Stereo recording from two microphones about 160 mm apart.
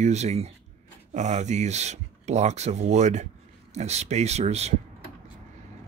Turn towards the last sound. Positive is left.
turn(degrees=-45)  # may be behind; listen again after turning